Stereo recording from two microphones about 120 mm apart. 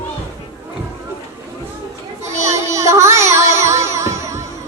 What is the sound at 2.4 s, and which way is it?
Music, 25° right (ahead or behind).